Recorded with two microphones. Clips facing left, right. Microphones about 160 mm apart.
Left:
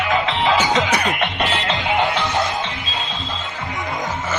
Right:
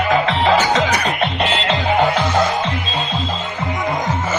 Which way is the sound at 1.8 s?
45° right (ahead or behind).